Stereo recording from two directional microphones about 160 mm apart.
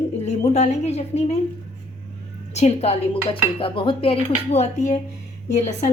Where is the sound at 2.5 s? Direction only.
45° left (ahead or behind).